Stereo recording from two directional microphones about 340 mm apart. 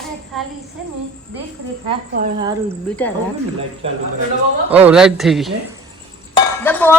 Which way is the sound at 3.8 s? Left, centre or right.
Centre.